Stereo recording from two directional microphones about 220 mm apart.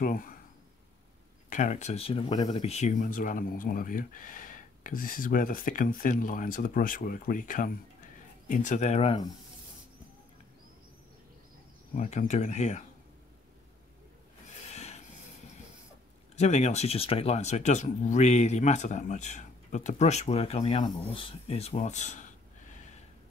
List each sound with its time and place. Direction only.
0.0 s speech: 40° left (ahead or behind)
1.5 s speech: 35° left (ahead or behind)
11.9 s speech: 35° left (ahead or behind)
14.7 s a sound: 30° left (ahead or behind)
16.3 s speech: 30° left (ahead or behind)